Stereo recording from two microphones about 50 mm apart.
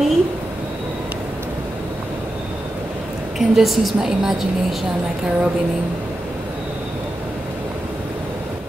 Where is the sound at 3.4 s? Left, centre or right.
Centre.